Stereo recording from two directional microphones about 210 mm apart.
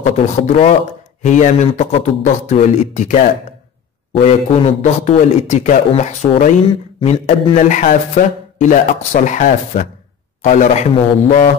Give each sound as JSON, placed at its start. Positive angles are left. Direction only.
{"t": 0.0, "sound": "a man's voice", "side_deg": 30}